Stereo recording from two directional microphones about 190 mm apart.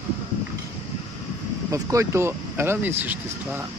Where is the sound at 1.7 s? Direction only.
15° right (ahead or behind).